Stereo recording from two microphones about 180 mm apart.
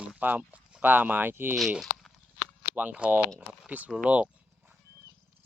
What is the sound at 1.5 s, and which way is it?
Speech, centre (ahead or behind).